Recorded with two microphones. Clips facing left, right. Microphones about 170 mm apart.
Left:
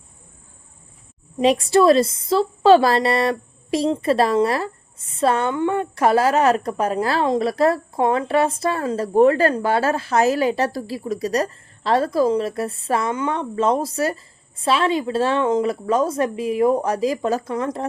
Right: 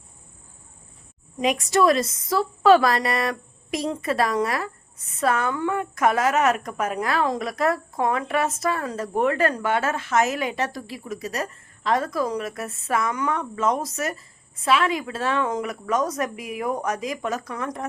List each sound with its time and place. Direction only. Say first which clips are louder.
1.4 s a woman's voice: left 5 dB; 30° left (ahead or behind)